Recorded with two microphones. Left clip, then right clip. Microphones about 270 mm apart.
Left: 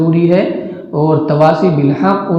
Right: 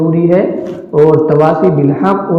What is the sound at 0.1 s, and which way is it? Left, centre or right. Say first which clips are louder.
A man's voice: right 1 dB; left.